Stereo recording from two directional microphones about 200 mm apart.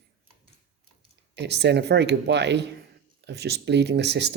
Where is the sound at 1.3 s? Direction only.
55° right (ahead or behind).